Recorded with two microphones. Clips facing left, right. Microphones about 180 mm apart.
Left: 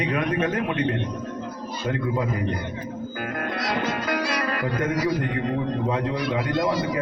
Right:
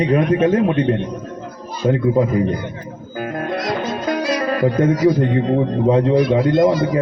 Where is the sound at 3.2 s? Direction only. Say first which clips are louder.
Right 8 dB; 25° right (ahead or behind).